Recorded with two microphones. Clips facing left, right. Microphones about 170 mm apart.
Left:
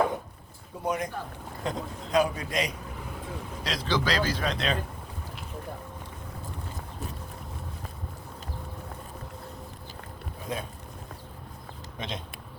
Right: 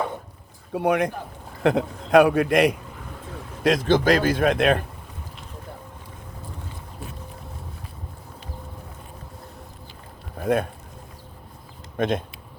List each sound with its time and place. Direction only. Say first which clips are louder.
0.7 s a man's voice: right 9 dB; 70° right (ahead or behind)
10.4 s speech: right 13 dB; 60° right (ahead or behind)
11.9 s speech: right 14 dB; 55° right (ahead or behind)